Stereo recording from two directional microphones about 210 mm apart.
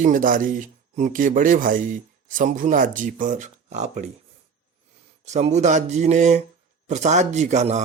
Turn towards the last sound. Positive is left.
turn(degrees=-35)  # may be behind; listen again after turning